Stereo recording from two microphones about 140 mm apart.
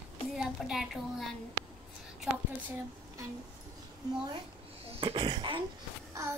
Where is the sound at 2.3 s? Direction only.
10° right (ahead or behind).